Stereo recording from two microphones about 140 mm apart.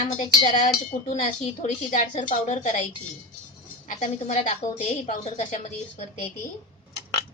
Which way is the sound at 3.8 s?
60° left (ahead or behind).